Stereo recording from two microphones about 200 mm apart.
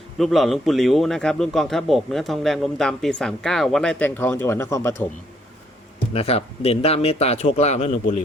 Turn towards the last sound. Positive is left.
turn(degrees=30)  # may be behind; listen again after turning